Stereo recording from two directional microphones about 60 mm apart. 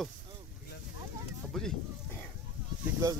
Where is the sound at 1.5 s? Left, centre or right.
Centre.